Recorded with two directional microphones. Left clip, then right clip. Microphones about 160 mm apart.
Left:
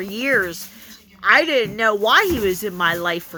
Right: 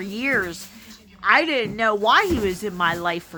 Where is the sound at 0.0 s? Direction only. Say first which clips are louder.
Left 4 dB; 20° left (ahead or behind).